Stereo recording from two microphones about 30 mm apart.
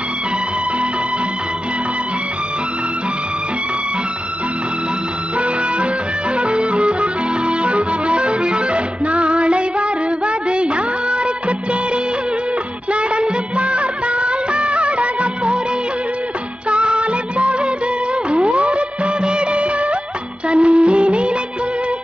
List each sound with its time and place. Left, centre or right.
6.3 s music: right
12.9 s music of bollywood: right
16.6 s music: right
18.3 s music of bollywood: right
20.4 s music: right